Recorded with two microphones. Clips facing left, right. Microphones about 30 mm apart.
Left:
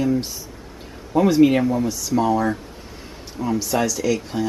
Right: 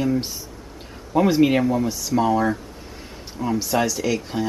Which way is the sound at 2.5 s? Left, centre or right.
Centre.